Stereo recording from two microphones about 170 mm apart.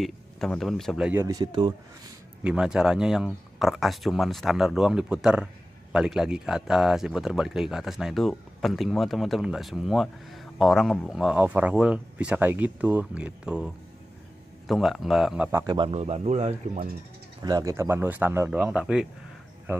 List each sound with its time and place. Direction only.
0.0 s speech: centre (ahead or behind)
1.2 s speech: 20° right (ahead or behind)
2.4 s speech: 5° right (ahead or behind)
14.7 s speech: centre (ahead or behind)
15.6 s speech: 25° right (ahead or behind)
15.9 s speech: 40° right (ahead or behind)
17.4 s speech: 20° right (ahead or behind); by 19.0 s 5° right (ahead or behind)